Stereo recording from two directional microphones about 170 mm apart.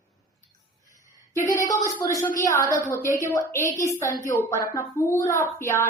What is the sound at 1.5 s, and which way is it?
A woman's voice, 20° left (ahead or behind).